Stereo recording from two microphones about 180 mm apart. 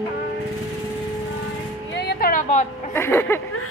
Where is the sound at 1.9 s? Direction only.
60° left (ahead or behind).